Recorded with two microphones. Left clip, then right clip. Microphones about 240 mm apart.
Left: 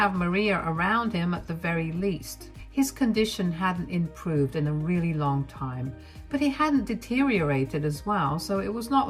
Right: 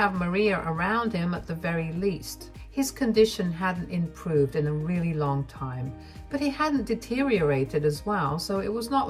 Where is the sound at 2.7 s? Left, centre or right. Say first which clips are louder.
Right 1 dB; left.